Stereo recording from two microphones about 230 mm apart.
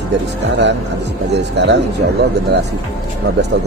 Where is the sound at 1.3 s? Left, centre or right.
Right.